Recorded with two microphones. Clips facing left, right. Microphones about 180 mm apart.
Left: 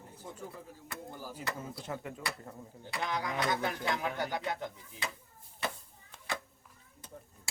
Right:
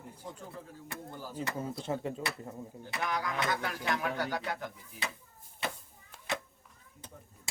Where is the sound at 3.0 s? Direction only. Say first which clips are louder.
Even; 20° left (ahead or behind).